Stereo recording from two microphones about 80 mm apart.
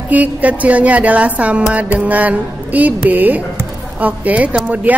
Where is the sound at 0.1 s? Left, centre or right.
Centre.